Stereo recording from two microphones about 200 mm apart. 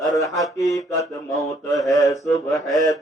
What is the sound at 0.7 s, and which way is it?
Mantra, 15° left (ahead or behind).